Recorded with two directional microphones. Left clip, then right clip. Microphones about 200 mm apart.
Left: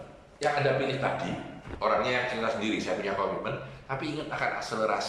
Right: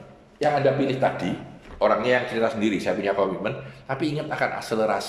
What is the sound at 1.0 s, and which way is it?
A man's voice, 40° right (ahead or behind).